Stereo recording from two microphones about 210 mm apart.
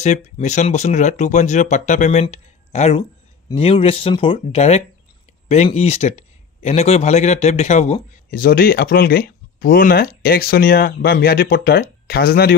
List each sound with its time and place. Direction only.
0.0 s speech: 35° left (ahead or behind)
8.3 s speech: 45° left (ahead or behind)